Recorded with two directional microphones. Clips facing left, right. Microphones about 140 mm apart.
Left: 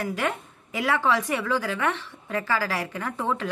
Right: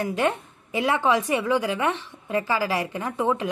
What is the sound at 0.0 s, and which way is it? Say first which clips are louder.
A woman's voice: right 4 dB; 20° right (ahead or behind).